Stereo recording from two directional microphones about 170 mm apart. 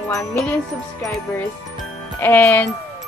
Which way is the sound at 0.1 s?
15° left (ahead or behind).